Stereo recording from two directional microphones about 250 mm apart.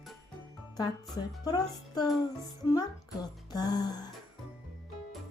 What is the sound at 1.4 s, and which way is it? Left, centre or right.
Speech, centre.